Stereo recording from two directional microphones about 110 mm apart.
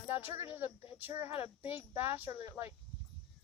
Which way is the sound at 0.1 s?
20° right (ahead or behind).